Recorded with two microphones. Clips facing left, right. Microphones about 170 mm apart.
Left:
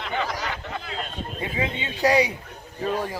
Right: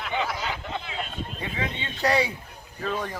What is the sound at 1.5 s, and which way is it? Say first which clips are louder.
Speech: left 4 dB; 15° left (ahead or behind).